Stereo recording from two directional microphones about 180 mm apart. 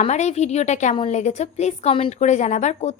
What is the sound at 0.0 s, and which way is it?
A woman's voice, 40° left (ahead or behind).